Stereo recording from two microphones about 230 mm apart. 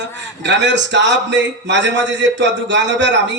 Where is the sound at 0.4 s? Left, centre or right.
Right.